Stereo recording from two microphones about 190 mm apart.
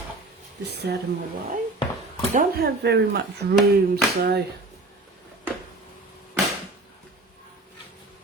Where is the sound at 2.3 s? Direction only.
50° right (ahead or behind).